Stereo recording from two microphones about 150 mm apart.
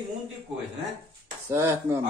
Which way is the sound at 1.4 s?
20° right (ahead or behind).